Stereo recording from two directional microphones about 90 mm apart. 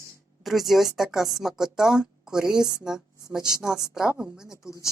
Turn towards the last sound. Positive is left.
turn(degrees=35)  # may be behind; listen again after turning